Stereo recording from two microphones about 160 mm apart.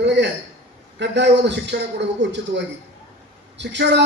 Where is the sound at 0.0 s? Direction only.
90° right.